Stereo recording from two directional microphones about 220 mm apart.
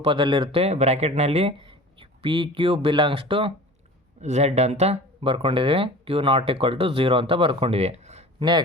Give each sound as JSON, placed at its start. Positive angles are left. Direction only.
{"t": 0.0, "sound": "speech", "side_deg": -25}